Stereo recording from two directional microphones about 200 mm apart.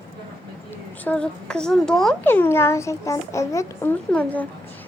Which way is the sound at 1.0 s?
5° left (ahead or behind).